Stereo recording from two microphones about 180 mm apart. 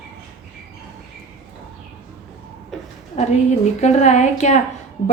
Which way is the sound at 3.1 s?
40° left (ahead or behind).